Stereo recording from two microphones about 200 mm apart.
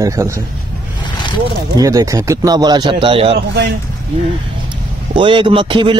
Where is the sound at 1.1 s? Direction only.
25° left (ahead or behind).